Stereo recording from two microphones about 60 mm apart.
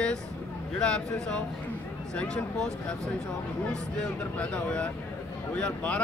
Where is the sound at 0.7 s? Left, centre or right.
Centre.